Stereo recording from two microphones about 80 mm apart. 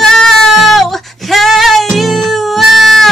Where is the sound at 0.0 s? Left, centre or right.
Centre.